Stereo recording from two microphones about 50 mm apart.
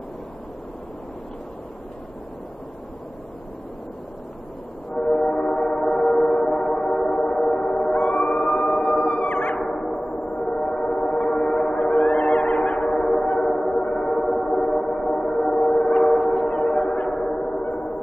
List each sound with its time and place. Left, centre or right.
4.9 s train: centre
8.5 s music: centre
9.1 s music: left
9.6 s gong: centre
11.8 s music: left
12.8 s train: centre
16.2 s gong: centre
17.1 s a sound: centre